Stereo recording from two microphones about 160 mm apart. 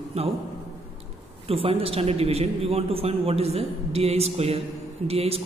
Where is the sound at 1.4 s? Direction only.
35° right (ahead or behind).